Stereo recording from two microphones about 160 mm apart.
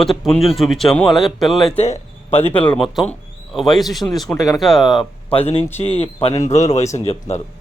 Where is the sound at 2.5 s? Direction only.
10° left (ahead or behind).